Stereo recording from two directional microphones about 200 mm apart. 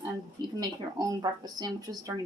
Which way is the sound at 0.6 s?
15° right (ahead or behind).